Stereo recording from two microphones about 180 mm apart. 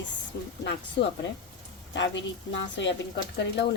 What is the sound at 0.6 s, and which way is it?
Speech, 70° left (ahead or behind).